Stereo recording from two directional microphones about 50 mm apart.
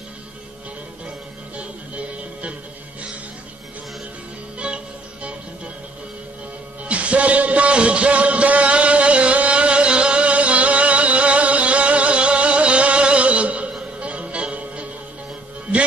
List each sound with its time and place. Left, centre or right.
1.6 s music: right
4.6 s music: right
6.9 s music: right